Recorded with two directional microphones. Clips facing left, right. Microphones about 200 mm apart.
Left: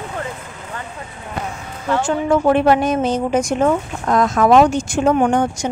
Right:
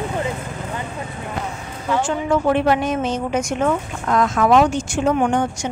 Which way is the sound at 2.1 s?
40° left (ahead or behind).